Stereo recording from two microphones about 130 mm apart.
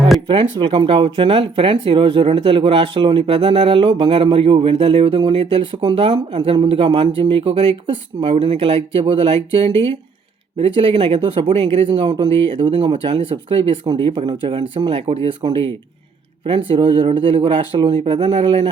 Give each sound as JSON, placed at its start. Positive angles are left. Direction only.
{"t": 0.3, "sound": "speech", "side_deg": -35}